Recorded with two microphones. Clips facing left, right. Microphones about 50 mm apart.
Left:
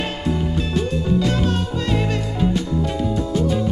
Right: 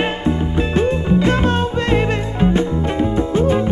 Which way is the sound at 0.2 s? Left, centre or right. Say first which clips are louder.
Right 4 dB; right.